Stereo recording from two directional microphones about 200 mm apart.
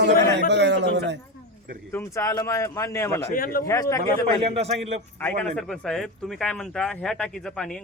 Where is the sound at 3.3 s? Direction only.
45° left (ahead or behind).